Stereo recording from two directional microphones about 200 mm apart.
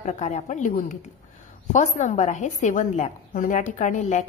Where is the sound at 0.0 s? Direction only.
35° left (ahead or behind).